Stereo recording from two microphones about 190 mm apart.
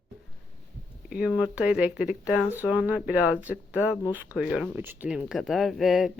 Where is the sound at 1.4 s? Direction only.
5° right (ahead or behind).